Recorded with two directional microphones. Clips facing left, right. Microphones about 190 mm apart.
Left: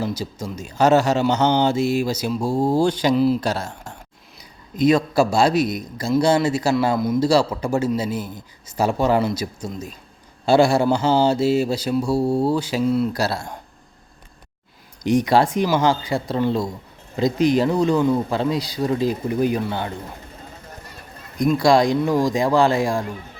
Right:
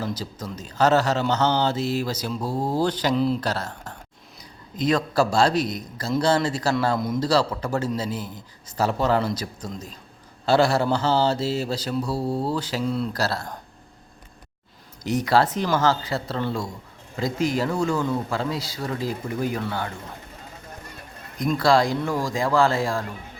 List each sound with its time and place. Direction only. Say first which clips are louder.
0.0 s a man's voice: left 4 dB; 10° left (ahead or behind)
15.0 s a man's voice: left 4 dB; 15° left (ahead or behind)
21.3 s a man's voice: left 4 dB; 15° left (ahead or behind)